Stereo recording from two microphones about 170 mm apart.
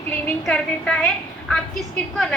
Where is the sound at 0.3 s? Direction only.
5° left (ahead or behind).